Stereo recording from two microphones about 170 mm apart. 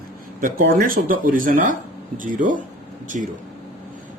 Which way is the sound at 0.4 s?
55° right (ahead or behind).